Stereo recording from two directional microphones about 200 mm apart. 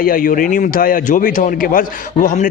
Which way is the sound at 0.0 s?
45° left (ahead or behind).